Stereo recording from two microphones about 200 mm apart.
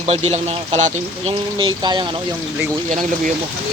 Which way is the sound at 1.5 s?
20° right (ahead or behind).